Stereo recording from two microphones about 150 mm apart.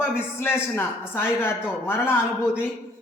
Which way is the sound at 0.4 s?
15° left (ahead or behind).